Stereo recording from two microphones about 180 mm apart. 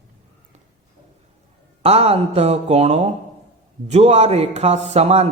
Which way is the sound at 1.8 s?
35° right (ahead or behind).